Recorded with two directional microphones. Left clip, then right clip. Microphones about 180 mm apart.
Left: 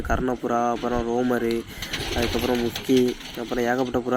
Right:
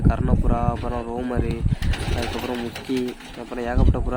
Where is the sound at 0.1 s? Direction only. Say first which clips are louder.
Left 4 dB; 20° left (ahead or behind).